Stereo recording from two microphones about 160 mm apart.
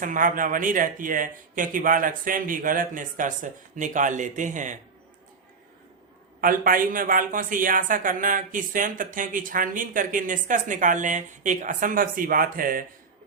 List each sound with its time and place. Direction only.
0.0 s speech: 55° right (ahead or behind)
6.4 s speech: 60° right (ahead or behind)